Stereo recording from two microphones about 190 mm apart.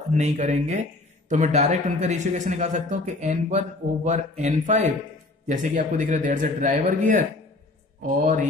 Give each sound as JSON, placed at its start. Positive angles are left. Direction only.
{"t": 0.1, "sound": "speech", "side_deg": -40}